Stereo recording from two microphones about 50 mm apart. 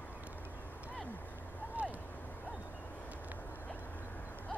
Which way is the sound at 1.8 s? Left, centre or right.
Right.